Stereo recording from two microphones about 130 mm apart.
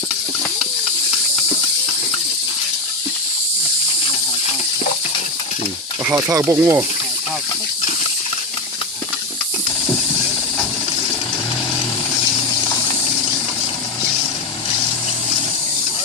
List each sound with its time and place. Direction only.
6.1 s speech: 15° right (ahead or behind)